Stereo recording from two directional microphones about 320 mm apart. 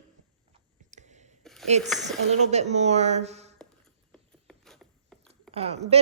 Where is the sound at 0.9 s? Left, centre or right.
Right.